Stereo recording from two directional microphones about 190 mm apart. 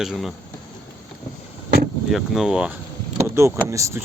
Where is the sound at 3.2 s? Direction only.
15° right (ahead or behind).